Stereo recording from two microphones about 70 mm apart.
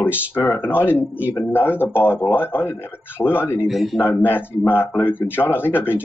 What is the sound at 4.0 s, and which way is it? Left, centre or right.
Speech, left.